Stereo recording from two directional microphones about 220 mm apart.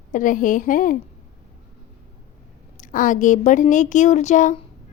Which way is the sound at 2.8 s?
35° left (ahead or behind).